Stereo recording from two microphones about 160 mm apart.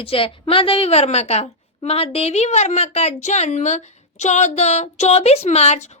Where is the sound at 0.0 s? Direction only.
35° left (ahead or behind).